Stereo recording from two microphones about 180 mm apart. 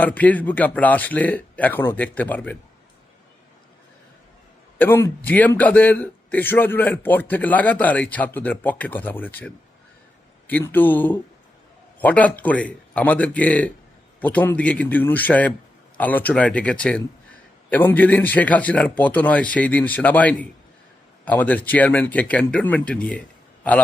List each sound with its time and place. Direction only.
0.0 s a man's voice: 10° left (ahead or behind)
4.8 s a man's voice: 10° left (ahead or behind)